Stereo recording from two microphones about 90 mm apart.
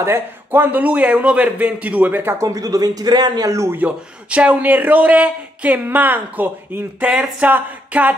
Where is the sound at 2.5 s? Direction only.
40° right (ahead or behind).